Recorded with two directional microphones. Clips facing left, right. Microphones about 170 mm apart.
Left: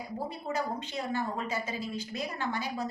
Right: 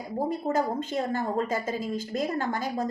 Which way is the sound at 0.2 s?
45° right (ahead or behind).